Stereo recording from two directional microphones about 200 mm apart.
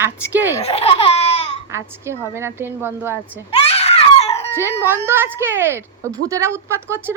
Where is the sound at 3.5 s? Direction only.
30° left (ahead or behind).